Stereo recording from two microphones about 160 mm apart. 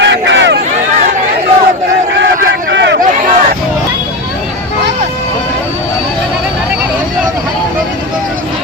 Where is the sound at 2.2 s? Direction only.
90° right.